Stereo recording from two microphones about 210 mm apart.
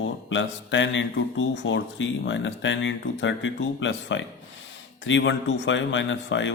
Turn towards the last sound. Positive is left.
turn(degrees=60)  # may be behind; listen again after turning